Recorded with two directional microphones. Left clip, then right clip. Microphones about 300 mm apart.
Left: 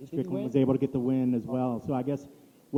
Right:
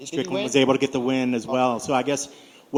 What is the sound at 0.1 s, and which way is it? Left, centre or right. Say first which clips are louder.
Speech: right 7 dB; centre.